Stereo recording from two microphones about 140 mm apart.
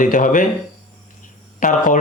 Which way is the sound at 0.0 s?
70° left (ahead or behind).